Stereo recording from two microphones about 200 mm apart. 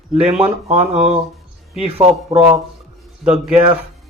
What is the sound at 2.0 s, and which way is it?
Speech, 30° right (ahead or behind).